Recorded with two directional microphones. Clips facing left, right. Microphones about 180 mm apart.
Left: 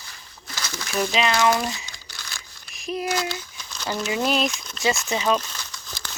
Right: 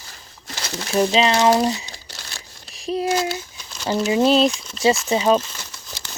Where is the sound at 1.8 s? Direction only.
35° right (ahead or behind).